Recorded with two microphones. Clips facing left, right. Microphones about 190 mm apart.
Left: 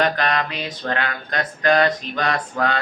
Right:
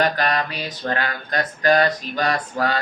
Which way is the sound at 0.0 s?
40° right (ahead or behind).